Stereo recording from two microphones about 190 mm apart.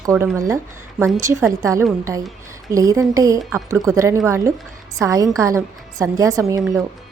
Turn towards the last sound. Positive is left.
turn(degrees=-15)  # may be behind; listen again after turning